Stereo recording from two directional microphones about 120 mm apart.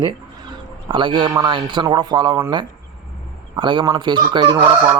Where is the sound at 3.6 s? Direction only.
45° right (ahead or behind).